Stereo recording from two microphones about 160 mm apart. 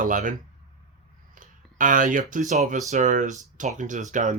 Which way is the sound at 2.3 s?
50° right (ahead or behind).